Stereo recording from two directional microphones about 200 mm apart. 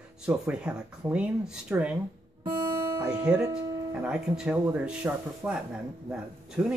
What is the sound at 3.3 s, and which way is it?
Speech, 5° right (ahead or behind).